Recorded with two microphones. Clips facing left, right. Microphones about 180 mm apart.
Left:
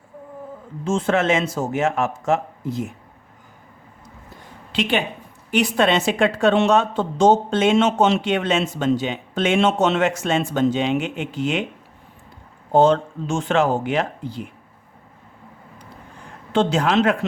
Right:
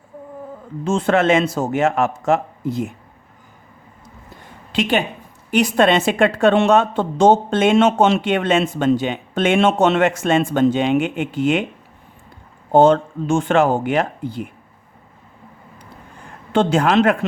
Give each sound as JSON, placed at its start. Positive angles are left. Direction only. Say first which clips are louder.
{"t": 0.9, "sound": "speech", "louder": "right 3 dB", "side_deg": -60}
{"t": 4.7, "sound": "a woman's voice", "louder": "right 3 dB", "side_deg": -45}
{"t": 12.7, "sound": "speech", "louder": "right 3 dB", "side_deg": -55}
{"t": 16.5, "sound": "speech", "louder": "right 3 dB", "side_deg": -55}